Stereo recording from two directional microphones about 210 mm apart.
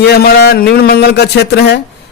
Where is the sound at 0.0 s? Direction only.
50° left (ahead or behind).